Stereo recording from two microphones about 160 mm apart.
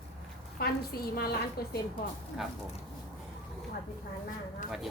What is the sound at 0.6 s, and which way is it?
Speech, 75° left (ahead or behind).